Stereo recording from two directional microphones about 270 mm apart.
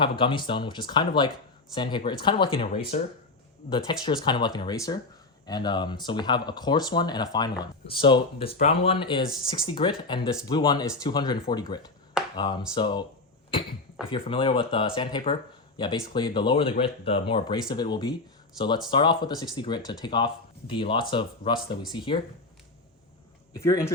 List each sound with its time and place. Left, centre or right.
0.0 s speech: centre
14.1 s speech: centre
23.6 s speech: centre